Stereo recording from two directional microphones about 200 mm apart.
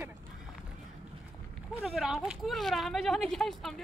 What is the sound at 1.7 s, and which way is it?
Speech, centre (ahead or behind).